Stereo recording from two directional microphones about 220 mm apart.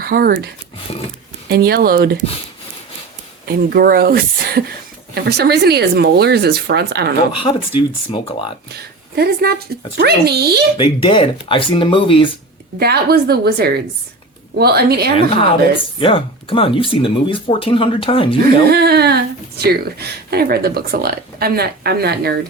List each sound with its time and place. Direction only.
0.0 s speech: 40° right (ahead or behind)
3.4 s speech: 45° right (ahead or behind)
7.3 s speech: 20° left (ahead or behind)
8.7 s a woman's voice: 45° right (ahead or behind)
10.8 s speech: 20° left (ahead or behind)
12.8 s speech: 45° right (ahead or behind)
16.0 s speech: 25° left (ahead or behind)
18.7 s speech: 45° right (ahead or behind)